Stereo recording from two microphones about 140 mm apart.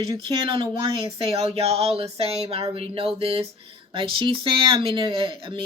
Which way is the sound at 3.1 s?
45° right (ahead or behind).